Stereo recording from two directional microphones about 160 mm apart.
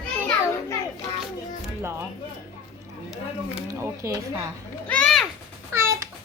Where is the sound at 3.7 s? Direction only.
20° right (ahead or behind).